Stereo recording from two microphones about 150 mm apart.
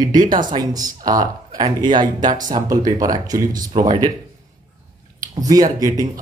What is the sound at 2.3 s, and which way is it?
Speech, 60° right (ahead or behind).